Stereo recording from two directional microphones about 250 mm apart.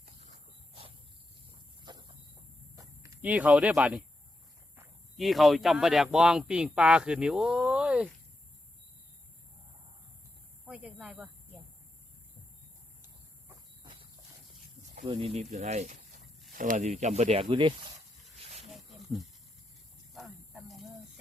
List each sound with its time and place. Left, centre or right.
0.0 s wild animals: right
1.8 s a sound: centre
2.7 s speech: centre
10.7 s speech: centre
13.8 s walk: right
15.0 s speech: right
18.3 s wild animals: right
18.7 s wild animals: centre
20.1 s a sound: centre